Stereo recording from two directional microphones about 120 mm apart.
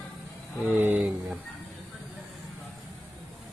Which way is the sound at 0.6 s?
15° right (ahead or behind).